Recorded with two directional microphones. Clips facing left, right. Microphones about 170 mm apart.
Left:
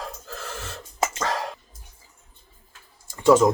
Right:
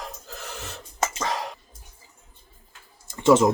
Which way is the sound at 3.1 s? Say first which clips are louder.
Left 1 dB; 20° right (ahead or behind).